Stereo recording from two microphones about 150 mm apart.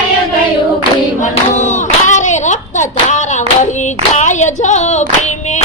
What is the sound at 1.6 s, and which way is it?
Clapping, 55° left (ahead or behind).